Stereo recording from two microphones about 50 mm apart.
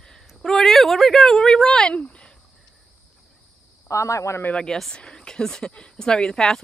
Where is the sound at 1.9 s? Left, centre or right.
Left.